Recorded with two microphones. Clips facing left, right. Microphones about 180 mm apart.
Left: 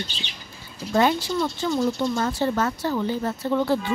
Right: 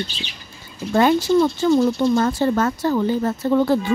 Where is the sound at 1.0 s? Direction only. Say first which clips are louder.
Right 6 dB; 55° right (ahead or behind).